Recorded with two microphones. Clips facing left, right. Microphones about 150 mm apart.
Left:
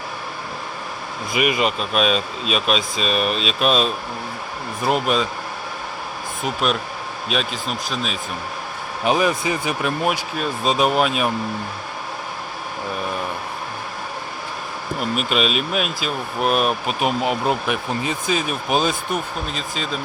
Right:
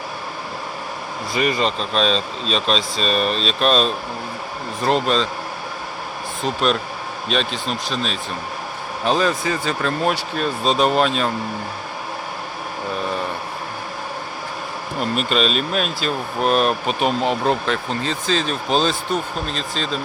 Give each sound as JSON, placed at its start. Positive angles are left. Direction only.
{"t": 1.3, "sound": "speech", "side_deg": 10}
{"t": 6.4, "sound": "speech", "side_deg": 5}
{"t": 15.1, "sound": "speech", "side_deg": 5}